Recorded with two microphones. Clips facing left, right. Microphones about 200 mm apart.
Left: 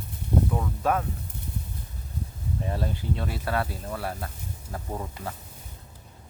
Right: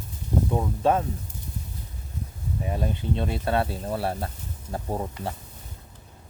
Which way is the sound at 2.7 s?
15° right (ahead or behind).